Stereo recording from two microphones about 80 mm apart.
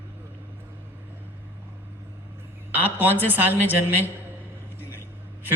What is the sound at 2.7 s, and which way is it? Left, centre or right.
Speech, right.